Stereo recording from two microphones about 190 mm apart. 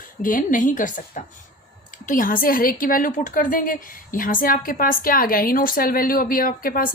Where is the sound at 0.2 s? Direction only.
45° left (ahead or behind).